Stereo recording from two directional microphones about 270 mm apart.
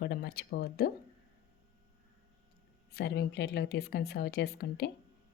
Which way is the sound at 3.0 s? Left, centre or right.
Left.